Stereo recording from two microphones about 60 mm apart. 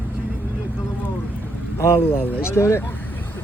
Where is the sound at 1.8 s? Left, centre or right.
Left.